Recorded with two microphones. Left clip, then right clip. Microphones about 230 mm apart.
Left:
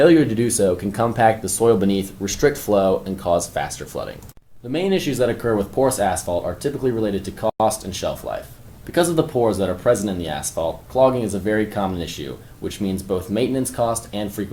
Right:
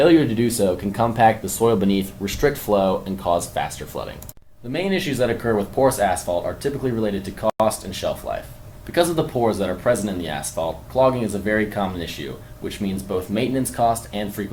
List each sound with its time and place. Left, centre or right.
0.0 s speech: left
4.7 s speech: left